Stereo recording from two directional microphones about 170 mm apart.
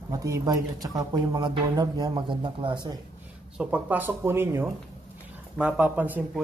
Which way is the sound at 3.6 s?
10° right (ahead or behind).